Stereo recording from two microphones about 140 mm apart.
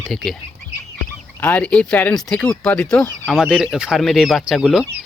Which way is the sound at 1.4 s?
10° left (ahead or behind).